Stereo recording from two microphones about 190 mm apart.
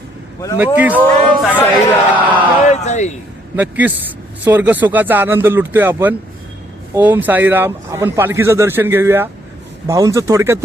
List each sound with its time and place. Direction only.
0.6 s speech: 10° right (ahead or behind)
1.5 s speech: 10° left (ahead or behind)
2.2 s a sound: 10° right (ahead or behind)
2.8 s a man's voice: 40° left (ahead or behind)
3.5 s speech: 10° right (ahead or behind)